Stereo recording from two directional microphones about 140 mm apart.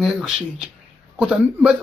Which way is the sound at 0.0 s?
5° right (ahead or behind).